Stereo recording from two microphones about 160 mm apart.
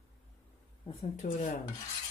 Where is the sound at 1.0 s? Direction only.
50° left (ahead or behind).